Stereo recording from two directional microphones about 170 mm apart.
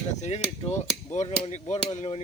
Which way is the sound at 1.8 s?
40° left (ahead or behind).